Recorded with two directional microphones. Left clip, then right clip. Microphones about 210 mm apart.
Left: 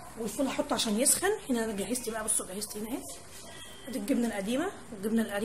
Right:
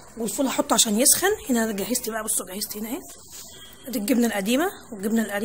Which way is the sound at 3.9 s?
45° right (ahead or behind).